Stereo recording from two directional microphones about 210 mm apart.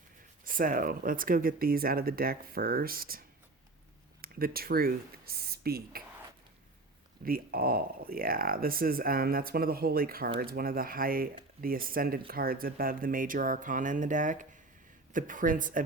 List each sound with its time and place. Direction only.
0.4 s speech: 40° right (ahead or behind)
7.3 s speech: 45° right (ahead or behind)